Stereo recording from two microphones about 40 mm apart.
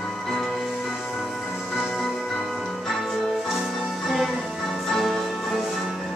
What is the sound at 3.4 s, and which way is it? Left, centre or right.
Music, centre.